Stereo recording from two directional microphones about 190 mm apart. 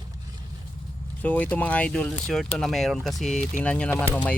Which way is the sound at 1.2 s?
10° left (ahead or behind).